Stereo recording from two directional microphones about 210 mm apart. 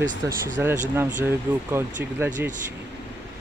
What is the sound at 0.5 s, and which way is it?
Speech, 10° right (ahead or behind).